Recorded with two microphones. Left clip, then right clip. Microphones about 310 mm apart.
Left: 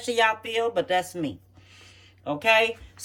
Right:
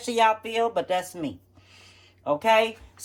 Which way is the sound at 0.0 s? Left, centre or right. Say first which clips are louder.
Right 1 dB; centre.